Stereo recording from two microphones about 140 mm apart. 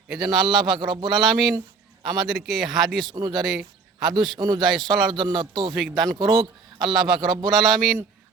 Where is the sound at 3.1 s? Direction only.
30° right (ahead or behind).